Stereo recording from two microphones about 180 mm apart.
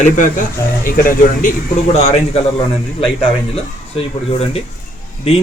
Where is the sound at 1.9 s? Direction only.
35° left (ahead or behind).